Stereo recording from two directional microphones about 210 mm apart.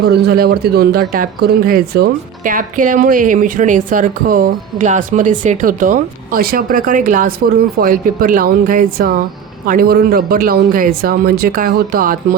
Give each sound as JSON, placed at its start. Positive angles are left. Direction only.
{"t": 0.1, "sound": "speech", "side_deg": -50}